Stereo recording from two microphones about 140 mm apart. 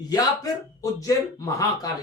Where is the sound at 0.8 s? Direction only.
25° left (ahead or behind).